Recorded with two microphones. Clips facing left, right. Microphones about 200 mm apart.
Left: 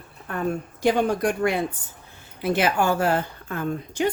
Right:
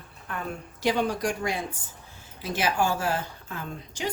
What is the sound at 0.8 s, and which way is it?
A woman's voice, 50° left (ahead or behind).